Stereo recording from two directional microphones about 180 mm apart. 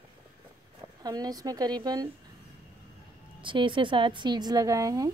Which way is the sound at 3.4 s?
25° right (ahead or behind).